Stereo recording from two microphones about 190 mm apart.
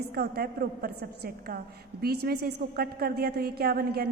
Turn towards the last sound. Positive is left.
turn(degrees=-55)  # may be behind; listen again after turning